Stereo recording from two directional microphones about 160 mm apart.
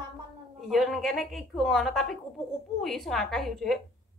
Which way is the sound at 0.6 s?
Centre (ahead or behind).